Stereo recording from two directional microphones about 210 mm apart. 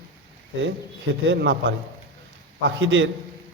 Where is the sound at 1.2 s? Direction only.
60° right (ahead or behind).